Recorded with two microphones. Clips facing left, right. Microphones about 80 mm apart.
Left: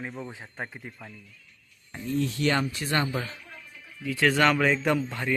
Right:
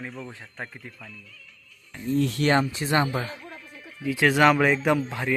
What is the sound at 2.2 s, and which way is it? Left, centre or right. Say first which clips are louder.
Speech: right 2 dB; right.